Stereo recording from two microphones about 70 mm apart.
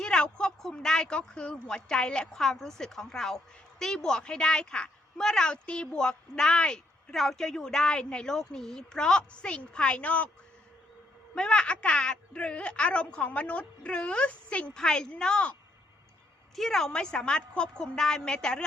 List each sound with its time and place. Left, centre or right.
0.0 s speech: centre
11.3 s speech: centre
16.6 s speech: centre